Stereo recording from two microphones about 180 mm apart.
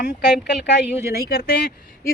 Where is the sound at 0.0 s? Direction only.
65° left (ahead or behind).